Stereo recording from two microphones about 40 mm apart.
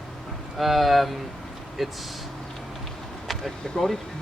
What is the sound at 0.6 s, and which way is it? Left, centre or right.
Speech, centre.